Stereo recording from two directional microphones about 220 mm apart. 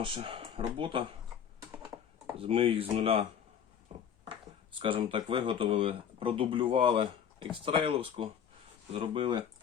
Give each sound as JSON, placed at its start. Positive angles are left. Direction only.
{"t": 0.0, "sound": "speech", "side_deg": -25}
{"t": 1.7, "sound": "computer keyboard", "side_deg": -20}
{"t": 4.8, "sound": "speech", "side_deg": -25}